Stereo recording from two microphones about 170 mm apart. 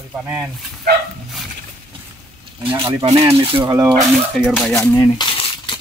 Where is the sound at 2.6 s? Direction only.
30° right (ahead or behind).